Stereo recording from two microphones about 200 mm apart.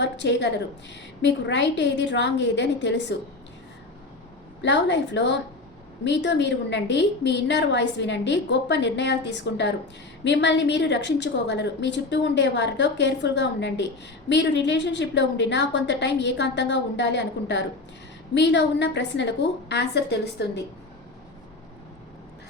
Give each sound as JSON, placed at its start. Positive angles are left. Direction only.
{"t": 0.0, "sound": "a woman's voice", "side_deg": 60}
{"t": 4.6, "sound": "a woman's voice", "side_deg": 60}